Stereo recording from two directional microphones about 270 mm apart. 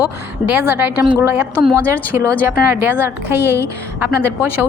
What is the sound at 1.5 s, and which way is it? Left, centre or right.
Speech, centre.